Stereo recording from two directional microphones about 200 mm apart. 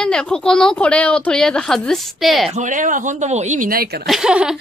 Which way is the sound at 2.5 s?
40° right (ahead or behind).